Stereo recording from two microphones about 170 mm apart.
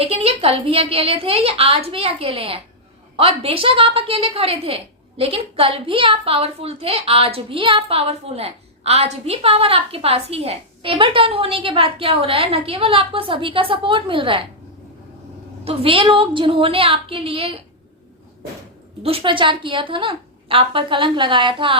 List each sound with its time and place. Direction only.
0.0 s a woman's voice: 35° right (ahead or behind)
15.6 s a woman's voice: 35° right (ahead or behind)
19.0 s a woman's voice: 30° right (ahead or behind)